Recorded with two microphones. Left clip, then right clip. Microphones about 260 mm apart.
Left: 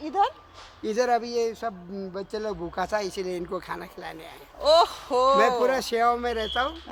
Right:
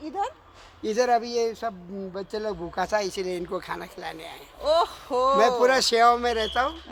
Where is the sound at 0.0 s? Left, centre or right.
Left.